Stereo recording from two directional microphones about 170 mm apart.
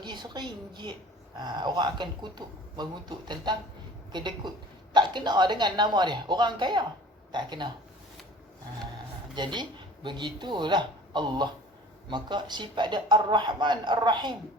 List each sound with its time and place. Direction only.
0.0 s speech: 25° right (ahead or behind)
9.3 s speech: 25° right (ahead or behind)